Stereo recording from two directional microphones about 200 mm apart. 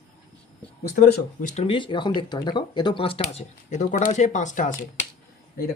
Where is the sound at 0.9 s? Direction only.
45° left (ahead or behind).